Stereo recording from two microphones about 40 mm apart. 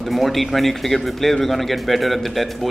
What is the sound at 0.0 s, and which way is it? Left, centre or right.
Speech, centre.